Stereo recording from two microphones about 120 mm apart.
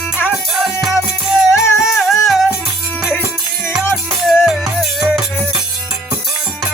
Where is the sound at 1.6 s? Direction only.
25° left (ahead or behind).